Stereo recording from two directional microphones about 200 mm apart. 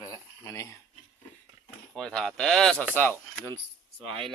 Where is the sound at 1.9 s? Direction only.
Centre (ahead or behind).